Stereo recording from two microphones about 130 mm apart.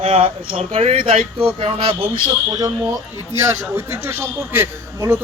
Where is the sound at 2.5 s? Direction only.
25° right (ahead or behind).